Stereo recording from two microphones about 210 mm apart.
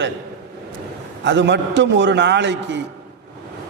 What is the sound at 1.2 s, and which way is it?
A man's voice, 60° right (ahead or behind).